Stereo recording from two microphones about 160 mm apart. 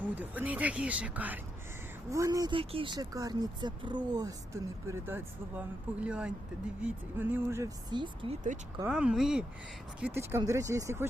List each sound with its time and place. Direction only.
0.0 s speech: 10° right (ahead or behind)
7.9 s speech: 30° right (ahead or behind)
8.9 s speech: 5° right (ahead or behind)
10.2 s speech: 15° right (ahead or behind)